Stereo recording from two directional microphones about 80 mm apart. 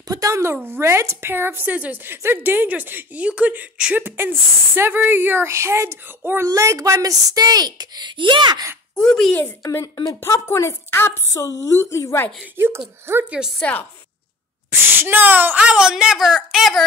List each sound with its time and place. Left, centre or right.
0.1 s a woman's voice: right; by 4.0 s centre
4.0 s a woman's voice: right
6.4 s speech: right
7.0 s speech: right
8.9 s speech: centre
10.2 s a woman's voice: left
11.4 s a woman's voice: left
12.5 s speech: right
13.3 s a woman's voice: centre
14.7 s a woman's voice: right
15.7 s a woman's voice: centre